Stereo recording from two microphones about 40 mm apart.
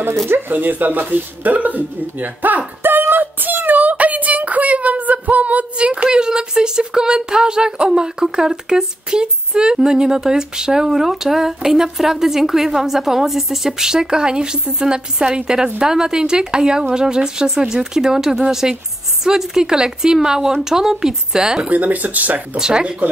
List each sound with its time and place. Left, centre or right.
0.5 s speech: right; by 21.6 s centre
21.6 s speech: right
22.6 s speech: right